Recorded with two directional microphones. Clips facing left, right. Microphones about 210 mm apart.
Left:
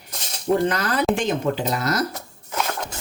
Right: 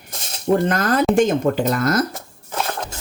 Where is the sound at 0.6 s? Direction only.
50° right (ahead or behind).